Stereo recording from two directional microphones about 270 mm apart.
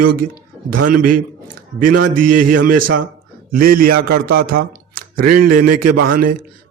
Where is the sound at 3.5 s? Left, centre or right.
Right.